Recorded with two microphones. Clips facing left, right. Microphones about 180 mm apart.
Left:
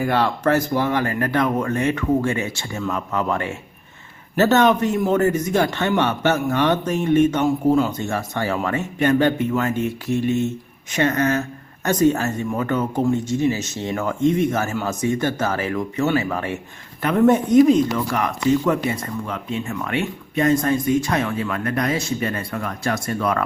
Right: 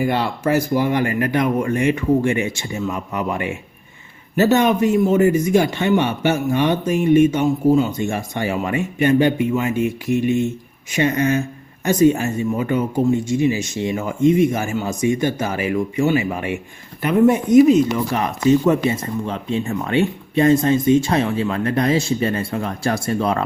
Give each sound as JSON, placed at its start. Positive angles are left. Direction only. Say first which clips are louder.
{"t": 0.0, "sound": "speech", "louder": "even", "side_deg": -10}
{"t": 17.8, "sound": "speech", "louder": "right 2 dB", "side_deg": -20}